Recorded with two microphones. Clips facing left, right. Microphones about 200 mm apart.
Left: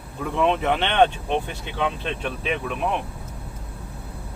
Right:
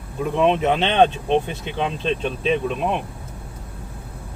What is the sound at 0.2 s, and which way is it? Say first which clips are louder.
Speech: right 4 dB; 20° right (ahead or behind).